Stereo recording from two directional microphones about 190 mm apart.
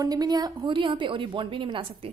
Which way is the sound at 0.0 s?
20° right (ahead or behind).